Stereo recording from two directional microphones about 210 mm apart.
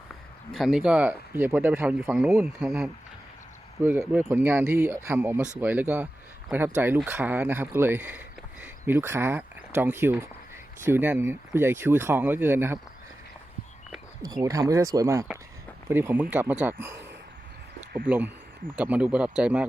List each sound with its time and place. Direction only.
0.5 s speech: centre (ahead or behind)
14.4 s speech: 15° right (ahead or behind)
18.8 s speech: 5° right (ahead or behind)